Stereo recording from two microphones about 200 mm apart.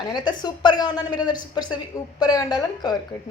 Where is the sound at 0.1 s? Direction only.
20° left (ahead or behind).